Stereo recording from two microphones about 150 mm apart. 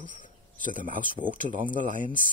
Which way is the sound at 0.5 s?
65° right (ahead or behind).